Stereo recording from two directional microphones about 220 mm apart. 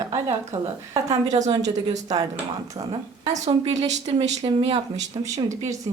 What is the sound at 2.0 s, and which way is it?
Speech, 15° right (ahead or behind).